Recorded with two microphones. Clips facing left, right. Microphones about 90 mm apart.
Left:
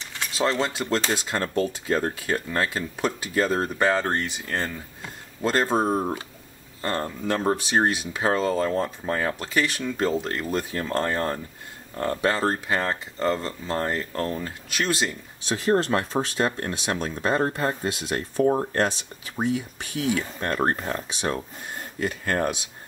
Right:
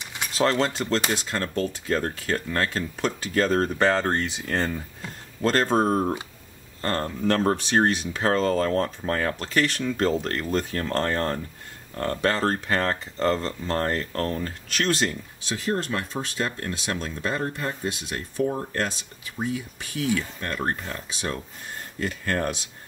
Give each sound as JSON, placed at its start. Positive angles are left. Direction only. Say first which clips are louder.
{"t": 0.0, "sound": "a sound", "louder": "even", "side_deg": -15}
{"t": 0.3, "sound": "speech", "louder": "right 2 dB", "side_deg": 5}
{"t": 15.4, "sound": "speech", "louder": "left 5 dB", "side_deg": 30}
{"t": 20.2, "sound": "speech", "louder": "left 4 dB", "side_deg": 30}
{"t": 21.2, "sound": "speech", "louder": "left 3 dB", "side_deg": 25}